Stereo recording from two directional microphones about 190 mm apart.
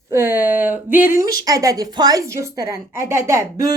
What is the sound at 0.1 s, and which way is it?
A woman's voice, 10° right (ahead or behind).